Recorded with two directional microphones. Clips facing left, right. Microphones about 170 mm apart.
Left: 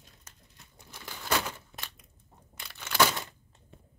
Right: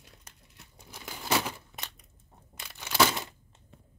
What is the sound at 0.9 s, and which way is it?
Crumpling, 15° right (ahead or behind).